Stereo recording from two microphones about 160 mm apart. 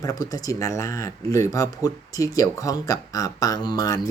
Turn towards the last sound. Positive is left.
turn(degrees=25)  # may be behind; listen again after turning